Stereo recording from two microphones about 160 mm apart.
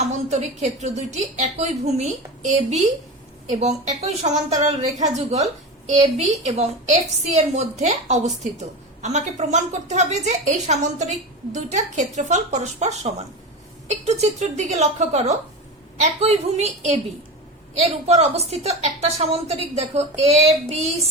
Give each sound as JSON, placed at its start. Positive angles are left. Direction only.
{"t": 0.3, "sound": "a woman's voice", "side_deg": -45}